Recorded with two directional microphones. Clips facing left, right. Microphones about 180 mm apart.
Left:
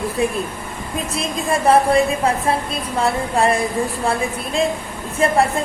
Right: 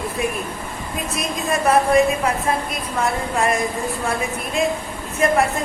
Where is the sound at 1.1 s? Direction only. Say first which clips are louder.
Left 2 dB; 30° left (ahead or behind).